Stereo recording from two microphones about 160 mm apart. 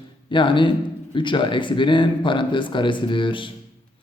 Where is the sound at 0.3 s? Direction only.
30° left (ahead or behind).